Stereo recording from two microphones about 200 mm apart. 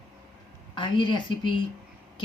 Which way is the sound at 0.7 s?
25° left (ahead or behind).